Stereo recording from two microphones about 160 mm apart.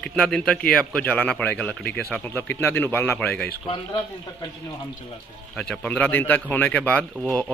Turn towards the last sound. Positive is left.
turn(degrees=10)  # may be behind; listen again after turning